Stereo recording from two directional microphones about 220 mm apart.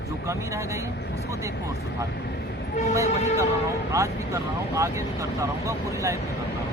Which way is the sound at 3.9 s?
15° right (ahead or behind).